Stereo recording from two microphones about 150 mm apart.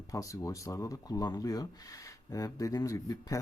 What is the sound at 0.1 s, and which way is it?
Speech, 20° left (ahead or behind).